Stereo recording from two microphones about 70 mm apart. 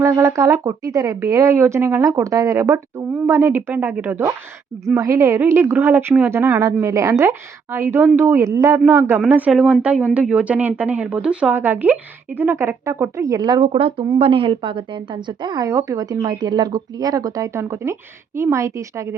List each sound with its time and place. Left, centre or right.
0.0 s speech: right
2.0 s a woman's voice: right
4.9 s a woman's voice: right
6.3 s a woman's voice: right
8.4 s a woman's voice: right
9.2 s speech: right
9.5 s speech: centre
11.5 s a woman's voice: right
13.1 s speech: right
14.0 s a woman's voice: right
14.9 s speech: right
15.6 s speech: right